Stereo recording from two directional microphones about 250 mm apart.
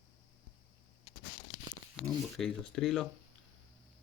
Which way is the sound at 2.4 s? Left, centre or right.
Centre.